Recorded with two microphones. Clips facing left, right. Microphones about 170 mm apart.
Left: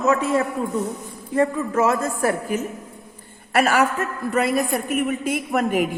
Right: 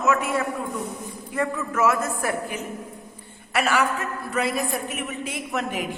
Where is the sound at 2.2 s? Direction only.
40° left (ahead or behind).